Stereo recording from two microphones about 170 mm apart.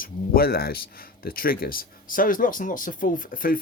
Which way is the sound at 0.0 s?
60° left (ahead or behind).